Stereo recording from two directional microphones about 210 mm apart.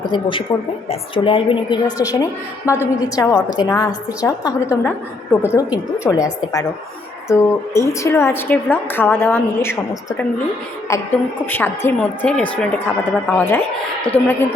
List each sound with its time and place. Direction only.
0.1 s a woman's voice: 25° left (ahead or behind)
11.4 s a woman's voice: 10° left (ahead or behind)